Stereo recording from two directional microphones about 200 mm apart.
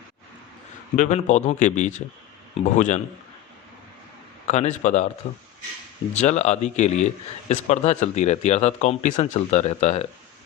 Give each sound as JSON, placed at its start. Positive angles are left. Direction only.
{"t": 0.9, "sound": "a man's voice", "side_deg": 40}
{"t": 4.4, "sound": "a man's voice", "side_deg": 35}